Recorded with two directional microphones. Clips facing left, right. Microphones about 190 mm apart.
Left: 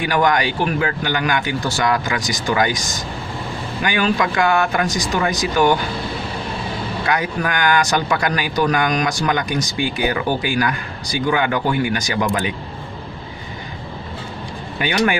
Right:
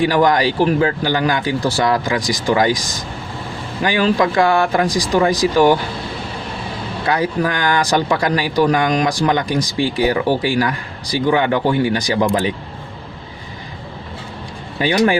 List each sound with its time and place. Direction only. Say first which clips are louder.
0.0 s speech: right 4 dB; 30° right (ahead or behind)
3.8 s speech: right 4 dB; 30° right (ahead or behind)
7.1 s a man's voice: right 4 dB; 30° right (ahead or behind)
14.8 s speech: right 4 dB; 30° right (ahead or behind)